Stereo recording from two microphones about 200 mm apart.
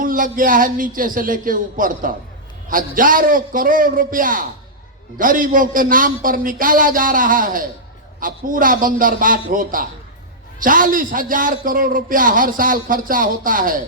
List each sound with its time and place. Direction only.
0.0 s a man's voice: 45° right (ahead or behind)